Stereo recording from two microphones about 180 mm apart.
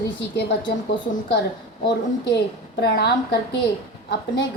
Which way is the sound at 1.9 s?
70° left (ahead or behind).